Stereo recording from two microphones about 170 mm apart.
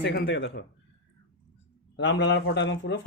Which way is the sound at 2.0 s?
90° left.